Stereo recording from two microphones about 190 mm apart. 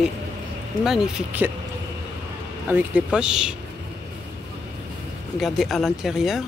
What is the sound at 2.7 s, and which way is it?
Speech, 5° right (ahead or behind).